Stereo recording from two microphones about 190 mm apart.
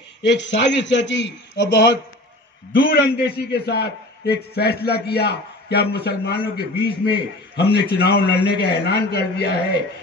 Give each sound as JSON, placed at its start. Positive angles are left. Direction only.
{"t": 0.2, "sound": "a man's voice", "side_deg": 70}
{"t": 2.7, "sound": "a man's voice", "side_deg": 55}